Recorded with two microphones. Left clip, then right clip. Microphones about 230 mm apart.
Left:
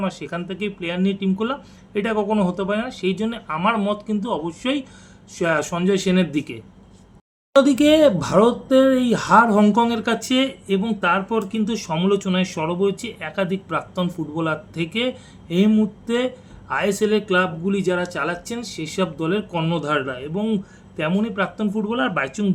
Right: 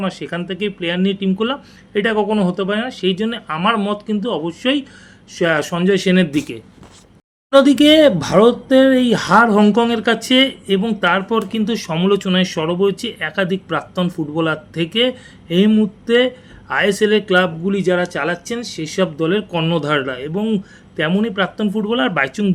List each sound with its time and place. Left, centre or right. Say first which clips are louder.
0.0 s speech: right 3 dB; centre
7.6 s speech: right 3 dB; centre